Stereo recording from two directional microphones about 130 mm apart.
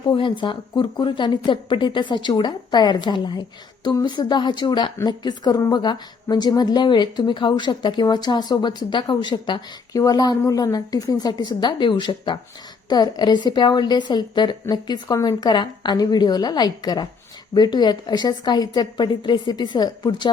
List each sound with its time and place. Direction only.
0.1 s speech: 40° left (ahead or behind)